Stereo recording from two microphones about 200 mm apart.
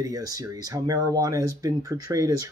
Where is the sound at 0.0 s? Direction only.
15° right (ahead or behind).